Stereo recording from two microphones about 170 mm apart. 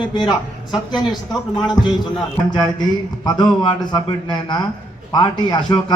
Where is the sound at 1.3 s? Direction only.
Centre (ahead or behind).